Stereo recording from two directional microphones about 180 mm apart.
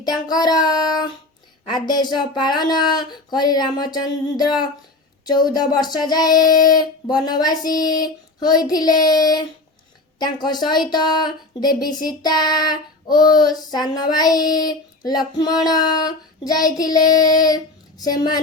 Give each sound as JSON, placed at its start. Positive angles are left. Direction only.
{"t": 0.0, "sound": "female singing", "side_deg": 25}